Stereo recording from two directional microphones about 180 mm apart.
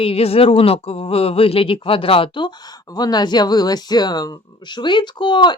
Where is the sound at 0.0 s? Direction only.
30° left (ahead or behind).